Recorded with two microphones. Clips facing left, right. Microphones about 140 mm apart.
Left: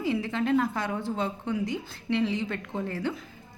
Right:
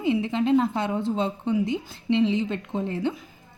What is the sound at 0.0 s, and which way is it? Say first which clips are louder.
A woman's voice: right 4 dB; 20° right (ahead or behind).